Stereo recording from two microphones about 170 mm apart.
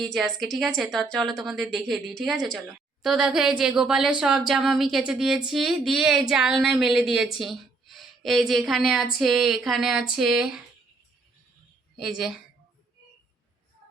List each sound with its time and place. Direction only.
0.0 s speech: centre (ahead or behind)
11.9 s speech: 5° right (ahead or behind)